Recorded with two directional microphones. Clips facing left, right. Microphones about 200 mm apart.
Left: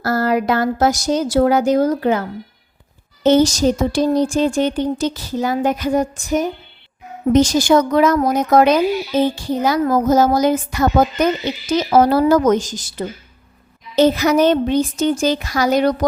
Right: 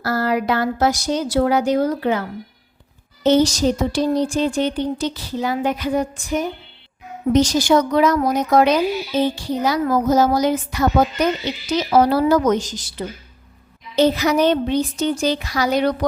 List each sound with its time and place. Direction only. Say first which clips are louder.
0.0 s speech: left 3 dB; 45° left (ahead or behind)
3.2 s speech: left 2 dB; 45° left (ahead or behind)